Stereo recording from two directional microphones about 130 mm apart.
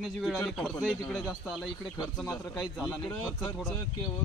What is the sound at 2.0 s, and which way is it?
Speech, 25° left (ahead or behind).